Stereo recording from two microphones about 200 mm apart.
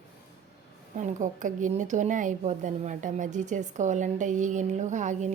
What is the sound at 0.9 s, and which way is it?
Speech, 40° right (ahead or behind).